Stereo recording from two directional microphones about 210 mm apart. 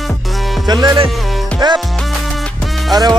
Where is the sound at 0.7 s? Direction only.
20° right (ahead or behind).